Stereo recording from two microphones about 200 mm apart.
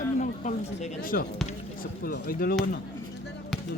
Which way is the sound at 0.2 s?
40° left (ahead or behind).